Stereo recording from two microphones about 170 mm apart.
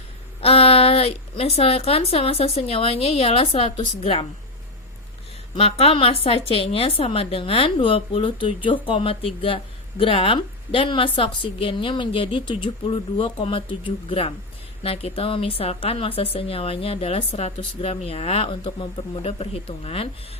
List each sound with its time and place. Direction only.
0.4 s speech: 35° left (ahead or behind)
5.5 s speech: 35° left (ahead or behind)